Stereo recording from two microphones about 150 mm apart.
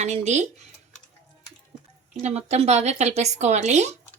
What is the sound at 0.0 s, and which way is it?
Speech, 50° right (ahead or behind).